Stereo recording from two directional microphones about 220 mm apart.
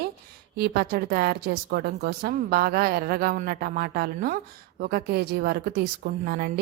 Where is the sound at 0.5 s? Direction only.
45° right (ahead or behind).